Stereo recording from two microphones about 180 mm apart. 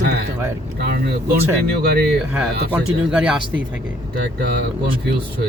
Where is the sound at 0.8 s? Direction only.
60° right (ahead or behind).